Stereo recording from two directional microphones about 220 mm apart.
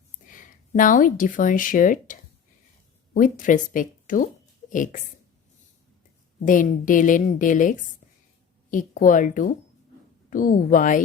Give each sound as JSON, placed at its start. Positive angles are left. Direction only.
{"t": 0.3, "sound": "speech", "side_deg": 35}
{"t": 3.2, "sound": "a woman's voice", "side_deg": 35}
{"t": 6.4, "sound": "a woman's voice", "side_deg": 35}